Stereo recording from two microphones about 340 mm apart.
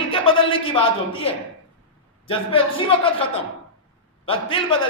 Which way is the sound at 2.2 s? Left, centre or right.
Centre.